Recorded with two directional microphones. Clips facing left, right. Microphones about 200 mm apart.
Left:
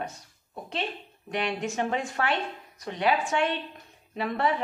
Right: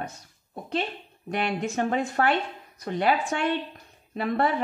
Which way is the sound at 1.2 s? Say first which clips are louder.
Right 2 dB; 45° right (ahead or behind).